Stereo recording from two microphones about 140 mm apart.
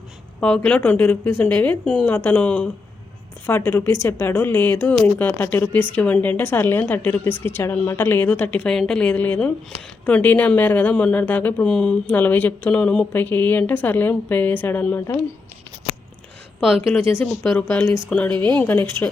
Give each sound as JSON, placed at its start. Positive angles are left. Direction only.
{"t": 0.3, "sound": "speech", "side_deg": 10}
{"t": 17.5, "sound": "speech", "side_deg": 5}